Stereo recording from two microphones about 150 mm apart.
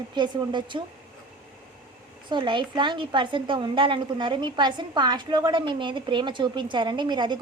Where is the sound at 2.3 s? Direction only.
30° right (ahead or behind).